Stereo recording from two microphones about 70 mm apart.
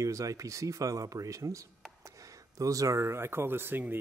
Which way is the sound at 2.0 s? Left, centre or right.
Right.